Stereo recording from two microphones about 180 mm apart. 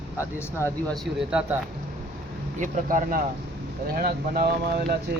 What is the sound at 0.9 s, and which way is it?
Speech, centre (ahead or behind).